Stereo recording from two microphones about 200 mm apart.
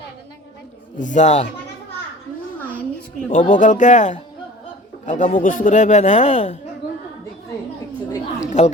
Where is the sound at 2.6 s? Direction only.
5° left (ahead or behind).